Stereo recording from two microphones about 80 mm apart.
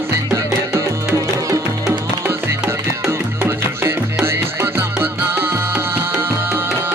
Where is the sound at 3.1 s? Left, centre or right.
Right.